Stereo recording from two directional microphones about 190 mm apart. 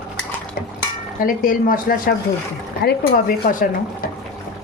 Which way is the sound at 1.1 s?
45° left (ahead or behind).